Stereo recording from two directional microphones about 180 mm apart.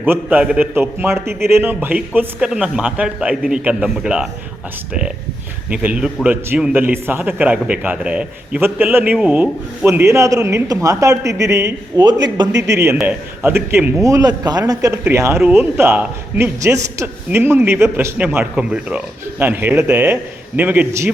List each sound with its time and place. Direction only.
0.0 s a man's voice: 10° right (ahead or behind)
5.7 s a man's voice: 5° right (ahead or behind); by 12.5 s 25° right (ahead or behind)
12.5 s speech: 75° right (ahead or behind)
12.7 s a man's voice: 15° right (ahead or behind)